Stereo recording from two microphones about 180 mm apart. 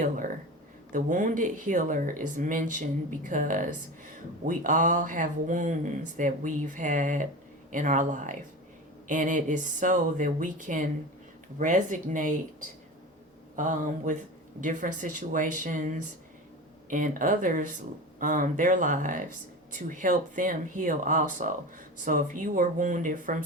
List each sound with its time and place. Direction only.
0.9 s speech: 45° right (ahead or behind)